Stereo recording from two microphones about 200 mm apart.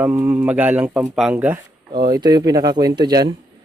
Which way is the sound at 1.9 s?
20° right (ahead or behind).